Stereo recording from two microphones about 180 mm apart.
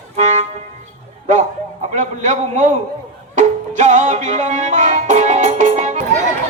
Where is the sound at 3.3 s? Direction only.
40° right (ahead or behind).